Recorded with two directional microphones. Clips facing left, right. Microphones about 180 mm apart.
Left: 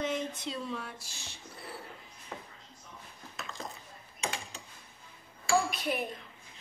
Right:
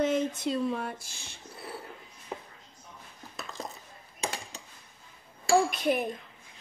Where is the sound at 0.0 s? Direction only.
50° right (ahead or behind).